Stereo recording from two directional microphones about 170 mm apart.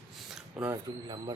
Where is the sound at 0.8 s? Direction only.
25° right (ahead or behind).